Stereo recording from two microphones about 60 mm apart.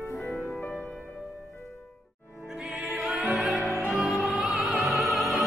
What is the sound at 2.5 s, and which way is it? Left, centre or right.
Music, centre.